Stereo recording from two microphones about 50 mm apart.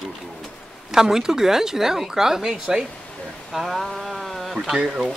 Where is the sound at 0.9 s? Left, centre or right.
Centre.